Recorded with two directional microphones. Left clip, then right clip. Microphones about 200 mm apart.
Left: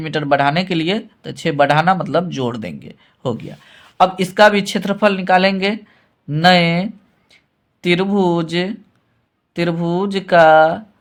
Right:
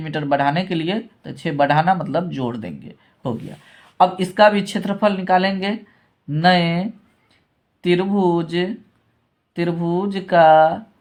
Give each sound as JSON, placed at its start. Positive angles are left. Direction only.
{"t": 0.0, "sound": "speech", "side_deg": 40}